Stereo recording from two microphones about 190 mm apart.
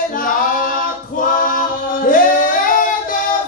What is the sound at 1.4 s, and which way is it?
Chant, 45° left (ahead or behind).